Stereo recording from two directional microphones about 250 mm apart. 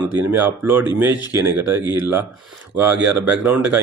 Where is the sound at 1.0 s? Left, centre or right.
Centre.